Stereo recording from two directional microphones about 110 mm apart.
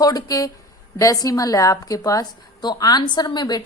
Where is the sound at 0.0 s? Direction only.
35° left (ahead or behind).